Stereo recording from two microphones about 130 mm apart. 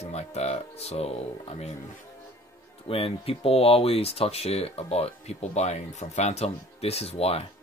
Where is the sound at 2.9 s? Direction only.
45° left (ahead or behind).